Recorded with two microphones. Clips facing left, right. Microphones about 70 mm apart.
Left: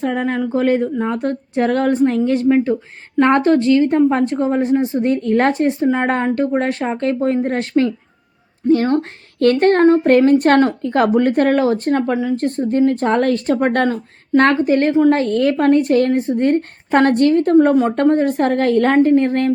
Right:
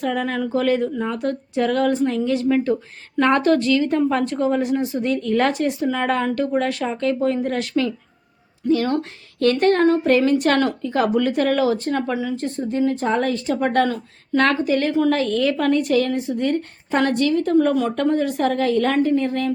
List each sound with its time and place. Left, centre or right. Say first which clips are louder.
0.0 s a woman's voice: left 3 dB; left
10.8 s a woman's voice: left 5 dB; left